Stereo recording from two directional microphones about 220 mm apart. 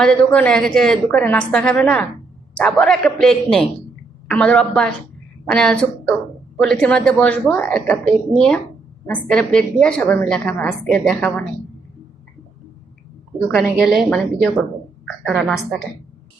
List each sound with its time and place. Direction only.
0.0 s a woman's voice: 5° left (ahead or behind)
13.7 s a woman's voice: centre (ahead or behind)